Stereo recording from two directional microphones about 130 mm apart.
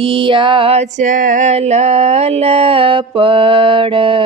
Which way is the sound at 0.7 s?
65° right (ahead or behind).